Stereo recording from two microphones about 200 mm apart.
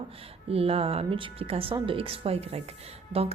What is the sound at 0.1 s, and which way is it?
A woman's voice, 30° right (ahead or behind).